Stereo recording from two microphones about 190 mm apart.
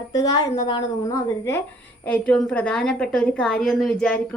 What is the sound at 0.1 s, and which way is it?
A woman's voice, 20° left (ahead or behind).